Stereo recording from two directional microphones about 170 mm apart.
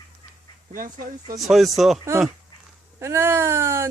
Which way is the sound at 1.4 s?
Centre (ahead or behind).